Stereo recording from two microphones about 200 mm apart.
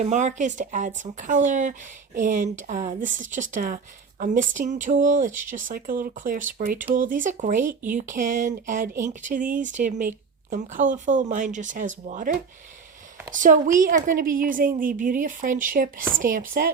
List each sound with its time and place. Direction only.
0.0 s a woman's voice: 35° right (ahead or behind)